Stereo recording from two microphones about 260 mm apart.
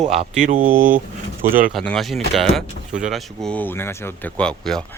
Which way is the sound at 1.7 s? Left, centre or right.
Centre.